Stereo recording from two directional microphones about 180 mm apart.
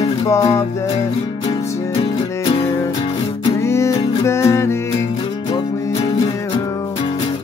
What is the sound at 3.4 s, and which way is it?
Music, 15° left (ahead or behind).